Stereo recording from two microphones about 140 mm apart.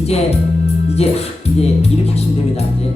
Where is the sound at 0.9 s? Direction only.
50° left (ahead or behind).